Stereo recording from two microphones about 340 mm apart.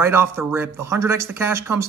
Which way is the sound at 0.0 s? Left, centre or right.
Centre.